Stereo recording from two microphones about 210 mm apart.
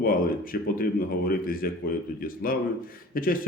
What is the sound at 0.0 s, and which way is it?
Speech, 45° left (ahead or behind).